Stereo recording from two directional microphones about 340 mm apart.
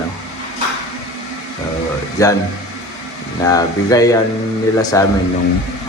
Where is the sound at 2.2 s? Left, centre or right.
Centre.